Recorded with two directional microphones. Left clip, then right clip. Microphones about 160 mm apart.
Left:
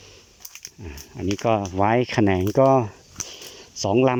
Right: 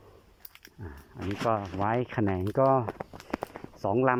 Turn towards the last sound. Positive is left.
turn(degrees=20)  # may be behind; listen again after turning